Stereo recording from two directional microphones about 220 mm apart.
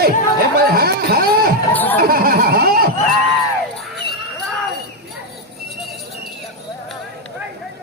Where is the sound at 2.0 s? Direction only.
40° right (ahead or behind).